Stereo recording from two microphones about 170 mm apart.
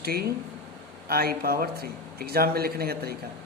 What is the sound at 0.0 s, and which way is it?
A man's voice, 65° right (ahead or behind).